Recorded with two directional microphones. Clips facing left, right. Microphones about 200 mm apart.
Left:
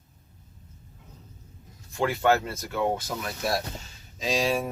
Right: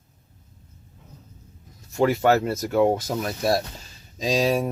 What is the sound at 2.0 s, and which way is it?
Speech, 40° right (ahead or behind).